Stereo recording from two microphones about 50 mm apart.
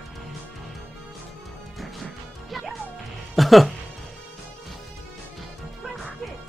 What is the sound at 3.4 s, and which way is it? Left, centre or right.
Speech, centre.